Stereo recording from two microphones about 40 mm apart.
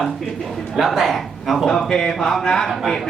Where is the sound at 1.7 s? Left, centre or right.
Centre.